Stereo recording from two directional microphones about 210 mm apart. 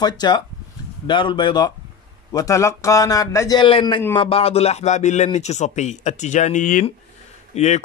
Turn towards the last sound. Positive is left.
turn(degrees=35)  # may be behind; listen again after turning